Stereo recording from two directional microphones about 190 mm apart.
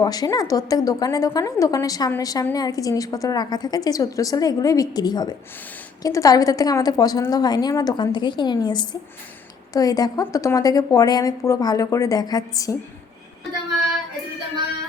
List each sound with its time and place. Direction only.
0.0 s a woman's voice: 20° left (ahead or behind)